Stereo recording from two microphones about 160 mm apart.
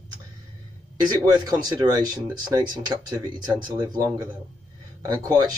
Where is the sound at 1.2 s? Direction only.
25° right (ahead or behind).